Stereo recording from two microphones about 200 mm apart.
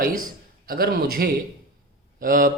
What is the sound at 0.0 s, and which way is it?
Speech, 45° right (ahead or behind).